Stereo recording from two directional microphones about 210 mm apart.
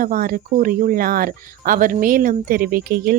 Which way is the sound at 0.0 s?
40° right (ahead or behind).